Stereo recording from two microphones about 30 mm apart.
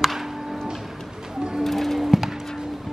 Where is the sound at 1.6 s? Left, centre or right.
Centre.